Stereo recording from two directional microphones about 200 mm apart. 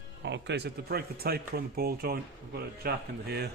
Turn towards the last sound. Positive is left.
turn(degrees=-55)  # may be behind; listen again after turning